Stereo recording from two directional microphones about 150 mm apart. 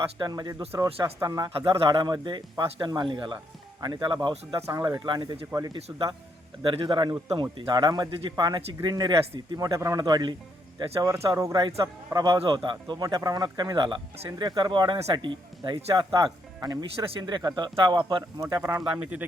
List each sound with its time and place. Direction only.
0.2 s speech: 25° right (ahead or behind)
5.7 s a man's voice: 30° right (ahead or behind)